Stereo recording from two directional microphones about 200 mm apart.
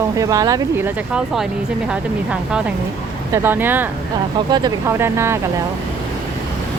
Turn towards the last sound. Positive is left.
turn(degrees=-15)  # may be behind; listen again after turning